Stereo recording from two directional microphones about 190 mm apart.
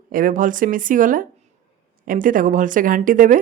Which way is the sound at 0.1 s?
45° right (ahead or behind).